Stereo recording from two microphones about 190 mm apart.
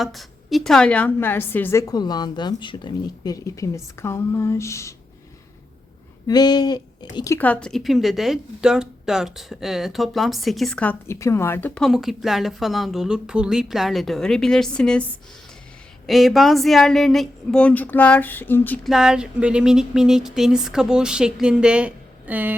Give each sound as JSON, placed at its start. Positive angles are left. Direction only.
{"t": 0.0, "sound": "a woman's voice", "side_deg": 0}
{"t": 6.2, "sound": "speech", "side_deg": 20}
{"t": 7.3, "sound": "speech", "side_deg": 10}
{"t": 18.9, "sound": "speech", "side_deg": -5}